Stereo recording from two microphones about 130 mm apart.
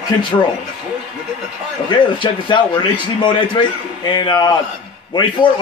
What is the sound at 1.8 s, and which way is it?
A man's voice, 40° left (ahead or behind).